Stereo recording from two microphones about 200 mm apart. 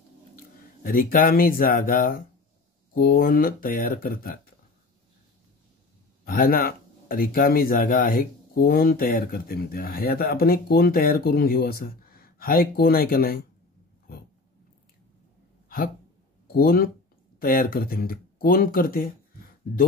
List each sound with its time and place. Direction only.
0.8 s a man's voice: 45° left (ahead or behind)
6.2 s a man's voice: 45° left (ahead or behind)
16.5 s a man's voice: 50° left (ahead or behind)